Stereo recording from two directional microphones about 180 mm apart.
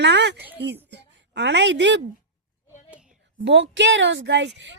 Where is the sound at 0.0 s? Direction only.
75° right (ahead or behind).